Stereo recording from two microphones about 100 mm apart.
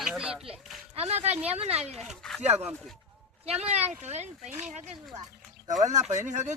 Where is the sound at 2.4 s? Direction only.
90° right.